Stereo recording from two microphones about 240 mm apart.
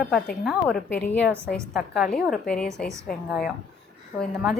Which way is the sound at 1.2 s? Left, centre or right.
Centre.